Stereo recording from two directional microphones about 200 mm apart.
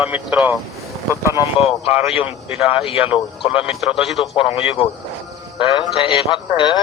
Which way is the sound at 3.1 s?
25° left (ahead or behind).